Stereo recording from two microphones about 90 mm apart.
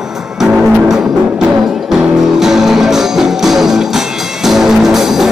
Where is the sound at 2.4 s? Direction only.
5° right (ahead or behind).